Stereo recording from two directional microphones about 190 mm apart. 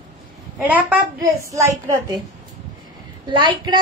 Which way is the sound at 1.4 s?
15° right (ahead or behind).